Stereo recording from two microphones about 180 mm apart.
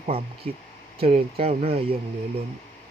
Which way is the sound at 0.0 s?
35° right (ahead or behind).